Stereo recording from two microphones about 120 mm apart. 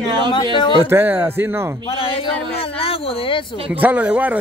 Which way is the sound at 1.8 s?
50° left (ahead or behind).